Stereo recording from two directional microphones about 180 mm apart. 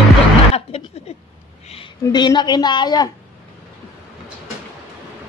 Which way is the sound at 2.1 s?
25° left (ahead or behind).